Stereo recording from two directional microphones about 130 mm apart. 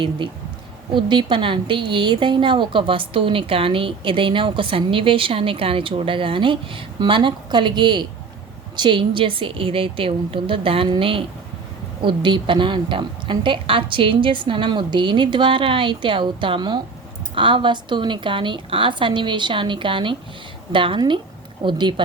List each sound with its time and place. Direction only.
0.9 s a woman's voice: 40° right (ahead or behind)